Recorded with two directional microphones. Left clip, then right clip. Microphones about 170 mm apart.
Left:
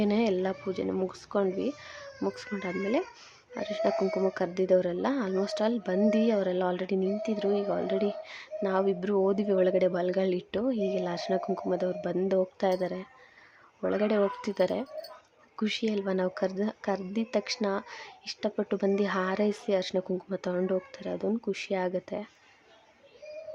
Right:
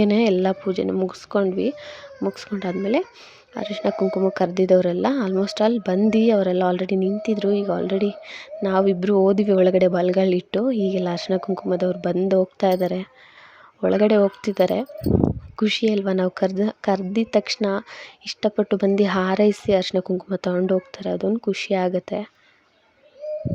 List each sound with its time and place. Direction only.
0.0 s speech: 35° right (ahead or behind)